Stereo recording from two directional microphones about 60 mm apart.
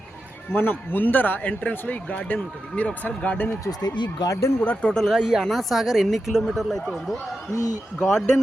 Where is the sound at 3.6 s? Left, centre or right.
Left.